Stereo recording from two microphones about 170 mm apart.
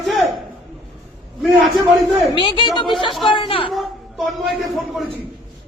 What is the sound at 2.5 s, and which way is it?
A woman's voice, 30° left (ahead or behind).